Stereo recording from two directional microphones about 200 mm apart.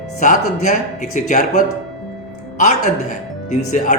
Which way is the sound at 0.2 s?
40° left (ahead or behind).